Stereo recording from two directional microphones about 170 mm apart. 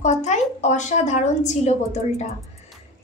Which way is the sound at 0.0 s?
45° left (ahead or behind).